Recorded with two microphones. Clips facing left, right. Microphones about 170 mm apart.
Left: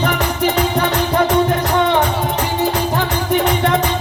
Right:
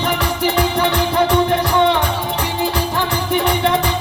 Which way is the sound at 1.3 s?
45° left (ahead or behind).